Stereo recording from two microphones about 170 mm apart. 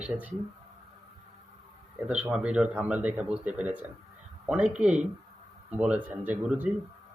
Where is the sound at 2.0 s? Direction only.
5° right (ahead or behind).